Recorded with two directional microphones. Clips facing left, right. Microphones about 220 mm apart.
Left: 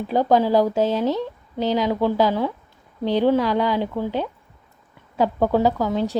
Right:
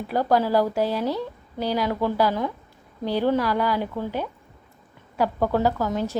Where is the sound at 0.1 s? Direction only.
20° left (ahead or behind).